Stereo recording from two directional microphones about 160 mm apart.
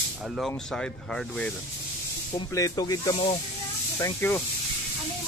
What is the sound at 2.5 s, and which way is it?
Speech, 20° left (ahead or behind).